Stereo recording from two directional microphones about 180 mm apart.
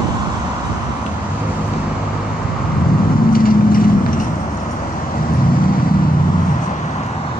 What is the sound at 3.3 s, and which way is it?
Vehicle, 55° left (ahead or behind).